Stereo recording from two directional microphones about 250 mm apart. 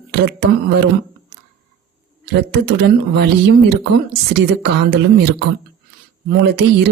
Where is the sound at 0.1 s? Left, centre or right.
Right.